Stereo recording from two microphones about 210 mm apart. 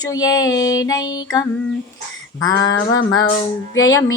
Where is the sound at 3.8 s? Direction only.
15° left (ahead or behind).